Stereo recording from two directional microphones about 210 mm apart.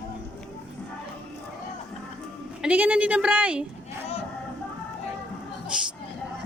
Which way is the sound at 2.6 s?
5° right (ahead or behind).